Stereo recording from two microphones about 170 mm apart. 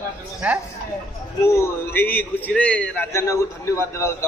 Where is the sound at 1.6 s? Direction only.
10° left (ahead or behind).